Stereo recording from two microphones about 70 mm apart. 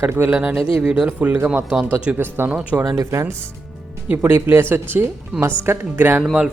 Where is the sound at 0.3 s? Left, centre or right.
Centre.